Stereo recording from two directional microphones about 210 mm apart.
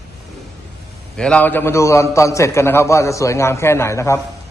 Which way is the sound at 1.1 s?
5° left (ahead or behind).